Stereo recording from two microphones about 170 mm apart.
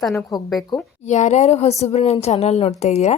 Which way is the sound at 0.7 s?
25° left (ahead or behind).